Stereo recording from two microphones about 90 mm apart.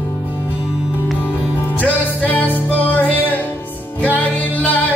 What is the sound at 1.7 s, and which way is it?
Music, 15° left (ahead or behind).